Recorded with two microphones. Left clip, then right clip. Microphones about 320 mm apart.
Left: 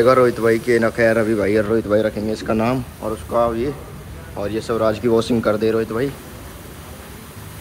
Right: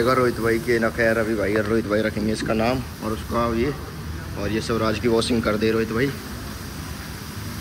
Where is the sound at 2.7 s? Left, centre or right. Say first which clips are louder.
Left 3 dB; left.